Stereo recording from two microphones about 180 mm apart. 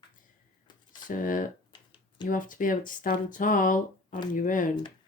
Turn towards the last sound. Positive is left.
turn(degrees=45)  # may be behind; listen again after turning